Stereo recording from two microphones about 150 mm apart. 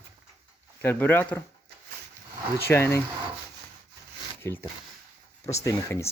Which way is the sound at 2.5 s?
15° left (ahead or behind).